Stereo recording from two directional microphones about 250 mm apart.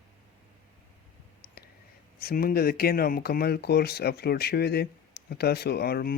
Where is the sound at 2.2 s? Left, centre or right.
Left.